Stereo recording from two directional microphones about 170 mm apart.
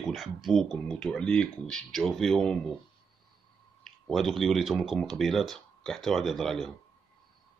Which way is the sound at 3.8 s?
Centre (ahead or behind).